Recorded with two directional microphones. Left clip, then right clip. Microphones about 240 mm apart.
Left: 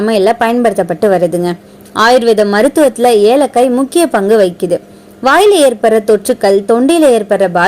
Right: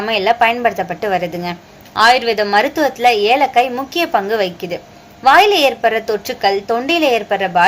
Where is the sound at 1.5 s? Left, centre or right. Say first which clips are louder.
Left 5 dB; left.